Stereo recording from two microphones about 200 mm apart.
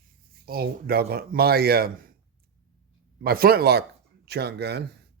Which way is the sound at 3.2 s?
50° right (ahead or behind).